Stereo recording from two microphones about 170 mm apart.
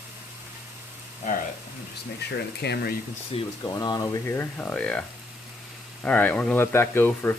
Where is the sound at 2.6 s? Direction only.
70° left (ahead or behind).